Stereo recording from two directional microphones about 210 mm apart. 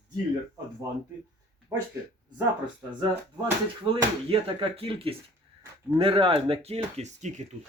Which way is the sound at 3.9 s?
25° right (ahead or behind).